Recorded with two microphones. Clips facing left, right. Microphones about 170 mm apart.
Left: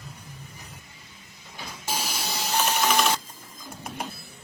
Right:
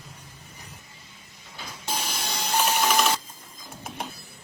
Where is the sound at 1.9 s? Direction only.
5° left (ahead or behind).